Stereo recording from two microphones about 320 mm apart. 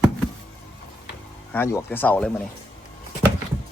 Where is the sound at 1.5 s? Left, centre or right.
Centre.